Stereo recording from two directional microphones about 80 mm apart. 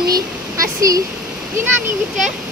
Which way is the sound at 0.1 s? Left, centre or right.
Right.